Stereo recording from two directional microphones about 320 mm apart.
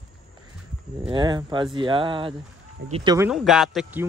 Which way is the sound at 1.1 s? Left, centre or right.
Centre.